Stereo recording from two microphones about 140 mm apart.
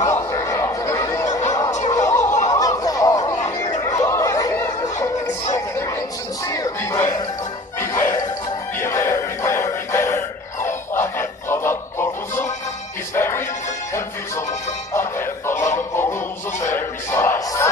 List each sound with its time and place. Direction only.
0.1 s a sound: 25° left (ahead or behind)
1.7 s music: 60° left (ahead or behind)
2.0 s snicker: 25° left (ahead or behind)
2.5 s a sound: 25° left (ahead or behind)
3.8 s snicker: 25° left (ahead or behind)
5.0 s music: 25° left (ahead or behind)
15.0 s music: 15° left (ahead or behind)
15.5 s fowl: 60° left (ahead or behind)
15.9 s fowl: 15° left (ahead or behind)
16.7 s a sound: 20° left (ahead or behind)